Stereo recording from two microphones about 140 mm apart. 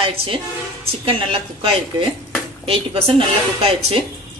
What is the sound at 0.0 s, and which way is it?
A woman's voice, 40° right (ahead or behind).